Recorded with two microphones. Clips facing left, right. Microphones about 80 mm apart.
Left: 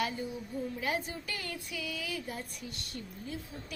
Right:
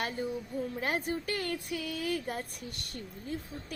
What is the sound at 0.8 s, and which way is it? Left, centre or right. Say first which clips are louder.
Child singing: right 4 dB; right.